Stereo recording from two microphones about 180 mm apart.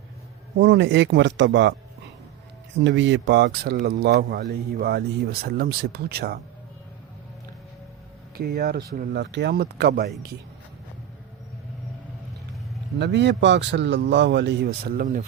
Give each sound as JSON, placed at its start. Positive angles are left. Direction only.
{"t": 0.6, "sound": "speech", "side_deg": -85}
{"t": 2.7, "sound": "speech", "side_deg": -90}
{"t": 8.4, "sound": "speech", "side_deg": -60}
{"t": 13.0, "sound": "a man's voice", "side_deg": -75}